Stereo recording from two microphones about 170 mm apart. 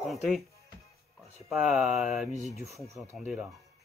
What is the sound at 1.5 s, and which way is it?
Speech, centre (ahead or behind).